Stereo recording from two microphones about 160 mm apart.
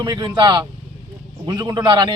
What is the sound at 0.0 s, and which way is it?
A man's voice, 30° right (ahead or behind).